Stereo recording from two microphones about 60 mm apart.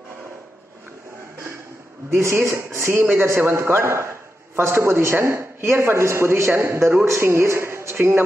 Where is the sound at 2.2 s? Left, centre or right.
Right.